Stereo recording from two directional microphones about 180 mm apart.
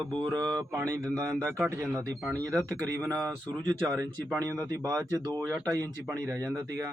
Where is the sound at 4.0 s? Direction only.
20° right (ahead or behind).